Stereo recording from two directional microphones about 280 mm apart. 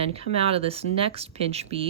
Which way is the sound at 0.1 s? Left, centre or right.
Right.